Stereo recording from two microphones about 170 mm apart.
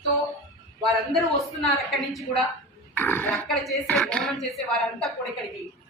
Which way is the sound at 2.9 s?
10° left (ahead or behind).